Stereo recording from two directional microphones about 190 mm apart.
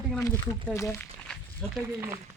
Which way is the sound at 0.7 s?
15° left (ahead or behind).